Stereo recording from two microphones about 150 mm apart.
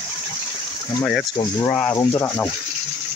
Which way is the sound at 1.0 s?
Centre (ahead or behind).